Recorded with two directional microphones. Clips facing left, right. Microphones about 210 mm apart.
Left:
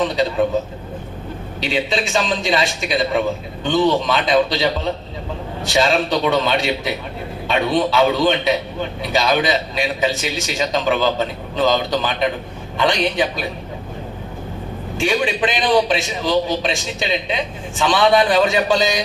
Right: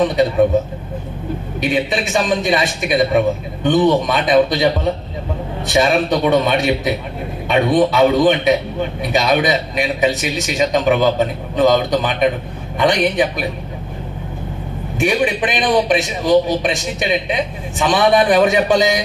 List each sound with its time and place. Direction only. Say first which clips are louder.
0.0 s a man's voice: right 4 dB; 20° right (ahead or behind)
1.6 s a man's voice: right 2 dB; 20° right (ahead or behind)
14.9 s a man's voice: right 3 dB; 20° right (ahead or behind)